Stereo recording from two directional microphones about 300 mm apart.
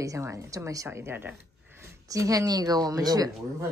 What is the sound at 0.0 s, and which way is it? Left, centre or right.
A woman's voice, centre.